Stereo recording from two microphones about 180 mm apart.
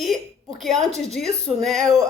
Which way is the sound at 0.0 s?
Centre (ahead or behind).